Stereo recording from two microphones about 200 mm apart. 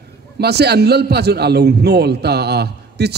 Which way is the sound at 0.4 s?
55° right (ahead or behind).